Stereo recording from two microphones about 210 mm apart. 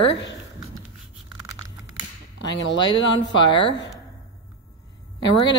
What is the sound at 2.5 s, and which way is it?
Speech, 55° left (ahead or behind).